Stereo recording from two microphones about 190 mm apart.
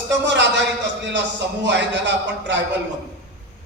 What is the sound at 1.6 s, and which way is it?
Speech, 70° right (ahead or behind).